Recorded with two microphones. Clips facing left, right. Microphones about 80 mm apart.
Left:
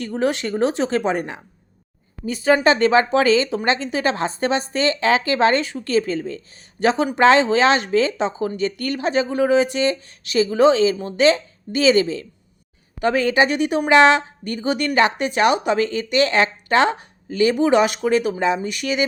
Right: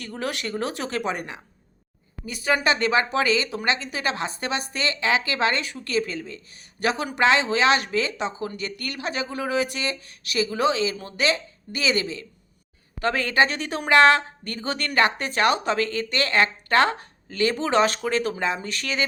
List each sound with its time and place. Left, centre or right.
0.0 s speech: left
13.0 s a woman's voice: centre